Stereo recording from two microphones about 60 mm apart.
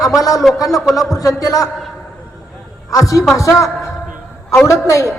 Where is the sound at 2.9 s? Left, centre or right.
Left.